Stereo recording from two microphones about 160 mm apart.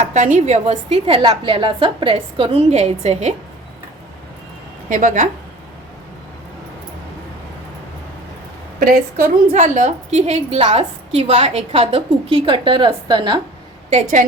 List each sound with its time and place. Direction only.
0.0 s a woman's voice: 50° right (ahead or behind)
4.9 s a woman's voice: 55° right (ahead or behind)
8.8 s a woman's voice: 65° right (ahead or behind)
9.5 s a woman's voice: 45° right (ahead or behind); by 13.4 s 30° right (ahead or behind)
13.9 s a woman's voice: 50° right (ahead or behind)